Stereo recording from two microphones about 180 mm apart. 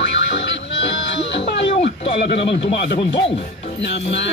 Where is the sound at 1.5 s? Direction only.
70° left (ahead or behind).